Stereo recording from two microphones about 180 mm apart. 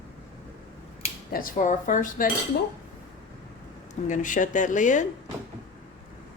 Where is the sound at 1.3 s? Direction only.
50° left (ahead or behind).